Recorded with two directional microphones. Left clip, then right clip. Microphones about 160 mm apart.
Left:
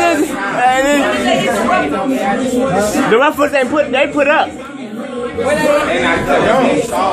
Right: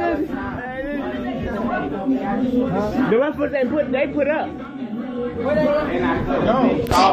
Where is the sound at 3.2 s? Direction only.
20° left (ahead or behind).